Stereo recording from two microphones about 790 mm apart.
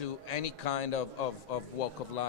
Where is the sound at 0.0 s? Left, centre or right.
Left.